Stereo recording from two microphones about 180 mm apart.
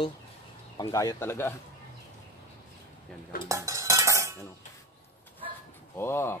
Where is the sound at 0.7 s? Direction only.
20° left (ahead or behind).